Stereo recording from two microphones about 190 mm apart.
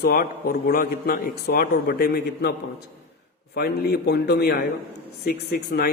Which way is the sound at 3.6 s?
55° left (ahead or behind).